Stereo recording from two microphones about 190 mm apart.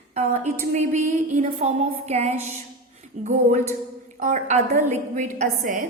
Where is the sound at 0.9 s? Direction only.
40° right (ahead or behind).